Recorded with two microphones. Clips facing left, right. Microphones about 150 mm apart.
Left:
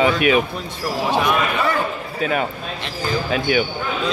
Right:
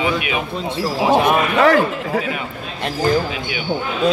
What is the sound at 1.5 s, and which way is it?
Speech, 90° right.